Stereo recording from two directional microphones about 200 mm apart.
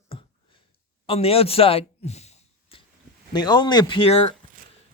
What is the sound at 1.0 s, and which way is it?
Clicking, 30° left (ahead or behind).